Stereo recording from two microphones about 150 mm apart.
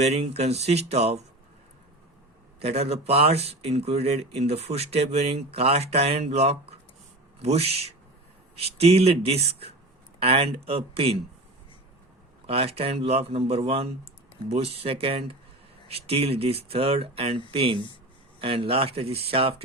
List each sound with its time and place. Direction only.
0.0 s speech: 45° right (ahead or behind)
2.6 s speech: 45° right (ahead or behind)
12.5 s speech: 40° right (ahead or behind)